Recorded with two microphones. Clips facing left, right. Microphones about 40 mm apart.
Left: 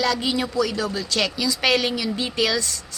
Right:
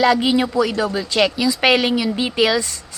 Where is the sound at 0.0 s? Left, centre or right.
Right.